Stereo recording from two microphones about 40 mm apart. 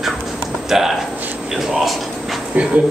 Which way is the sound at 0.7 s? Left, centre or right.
Centre.